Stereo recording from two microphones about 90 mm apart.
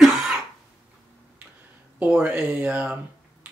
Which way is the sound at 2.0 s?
20° right (ahead or behind).